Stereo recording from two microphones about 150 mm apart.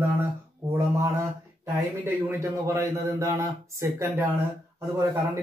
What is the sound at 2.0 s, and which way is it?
A man's voice, 15° right (ahead or behind).